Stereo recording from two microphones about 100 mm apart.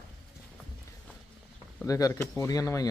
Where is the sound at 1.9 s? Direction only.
35° left (ahead or behind).